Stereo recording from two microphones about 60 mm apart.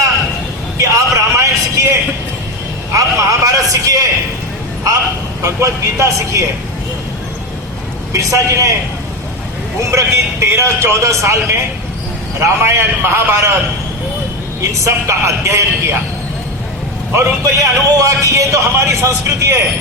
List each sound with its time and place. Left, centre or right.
0.8 s a sound: right
2.9 s a sound: right
5.4 s speech: right
8.1 s speech: right
9.9 s a man's voice: right
12.6 s a man's voice: right
14.6 s speech: right
17.2 s speech: right